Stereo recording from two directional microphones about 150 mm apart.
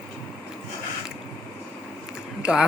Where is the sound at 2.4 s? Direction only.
5° right (ahead or behind).